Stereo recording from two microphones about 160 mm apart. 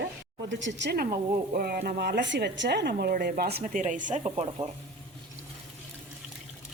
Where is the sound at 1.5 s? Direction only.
75° right (ahead or behind).